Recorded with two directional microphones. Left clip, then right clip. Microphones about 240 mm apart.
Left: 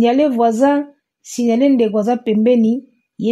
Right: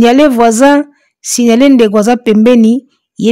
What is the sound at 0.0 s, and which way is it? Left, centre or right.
A woman's voice, right.